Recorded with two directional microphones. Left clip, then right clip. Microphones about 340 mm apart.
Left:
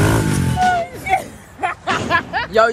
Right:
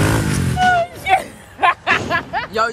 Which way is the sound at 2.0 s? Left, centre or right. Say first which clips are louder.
Left 2 dB; left.